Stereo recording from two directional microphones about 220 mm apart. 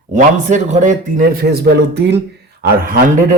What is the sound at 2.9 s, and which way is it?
Speech, 40° right (ahead or behind).